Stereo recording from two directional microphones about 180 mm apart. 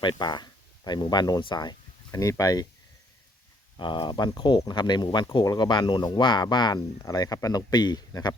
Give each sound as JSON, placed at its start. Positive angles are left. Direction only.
{"t": 0.0, "sound": "speech", "side_deg": 25}
{"t": 3.8, "sound": "speech", "side_deg": 25}